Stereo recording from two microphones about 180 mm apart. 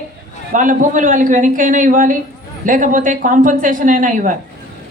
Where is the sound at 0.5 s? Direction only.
45° right (ahead or behind).